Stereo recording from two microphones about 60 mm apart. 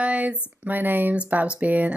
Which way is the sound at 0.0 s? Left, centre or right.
Right.